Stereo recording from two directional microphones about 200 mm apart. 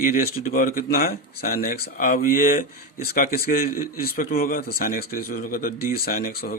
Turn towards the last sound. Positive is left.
turn(degrees=45)  # may be behind; listen again after turning